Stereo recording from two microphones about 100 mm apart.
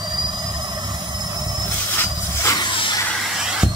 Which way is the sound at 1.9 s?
25° left (ahead or behind).